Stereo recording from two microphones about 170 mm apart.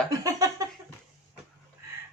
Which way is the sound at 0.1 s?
20° right (ahead or behind).